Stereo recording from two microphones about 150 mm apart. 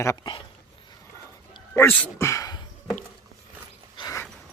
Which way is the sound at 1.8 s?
10° left (ahead or behind).